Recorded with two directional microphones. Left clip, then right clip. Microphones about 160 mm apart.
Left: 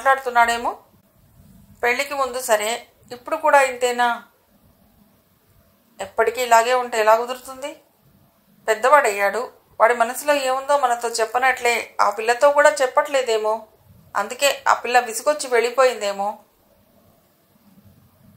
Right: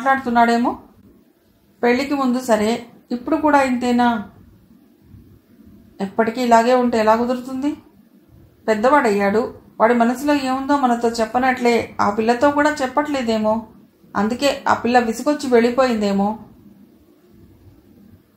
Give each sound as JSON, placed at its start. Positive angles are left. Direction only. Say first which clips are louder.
{"t": 0.0, "sound": "a woman's voice", "louder": "right 1 dB", "side_deg": 50}
{"t": 1.8, "sound": "a woman's voice", "louder": "right 2 dB", "side_deg": 50}
{"t": 5.9, "sound": "a woman's voice", "louder": "even", "side_deg": 50}